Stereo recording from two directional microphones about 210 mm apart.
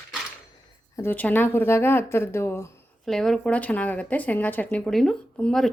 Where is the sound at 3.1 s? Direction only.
Centre (ahead or behind).